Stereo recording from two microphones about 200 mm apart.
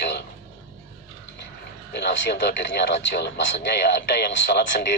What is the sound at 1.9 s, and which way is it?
Speech, 60° left (ahead or behind).